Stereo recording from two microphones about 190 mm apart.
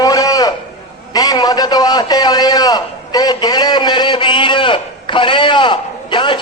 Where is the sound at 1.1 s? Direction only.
20° left (ahead or behind).